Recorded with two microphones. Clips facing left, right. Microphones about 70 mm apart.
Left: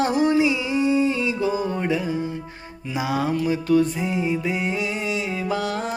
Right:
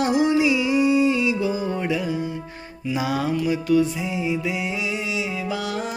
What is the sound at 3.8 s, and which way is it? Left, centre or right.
Music, left.